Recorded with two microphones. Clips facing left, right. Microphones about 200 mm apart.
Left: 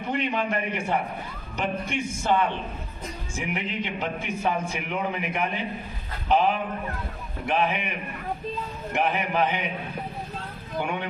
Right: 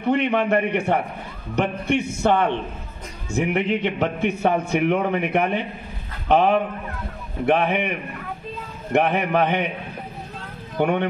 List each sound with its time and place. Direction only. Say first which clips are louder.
0.1 s a man's voice: right 7 dB; 65° right (ahead or behind)
8.9 s a man's voice: right 6 dB; 65° right (ahead or behind)
10.8 s a man's voice: right 9 dB; 60° right (ahead or behind)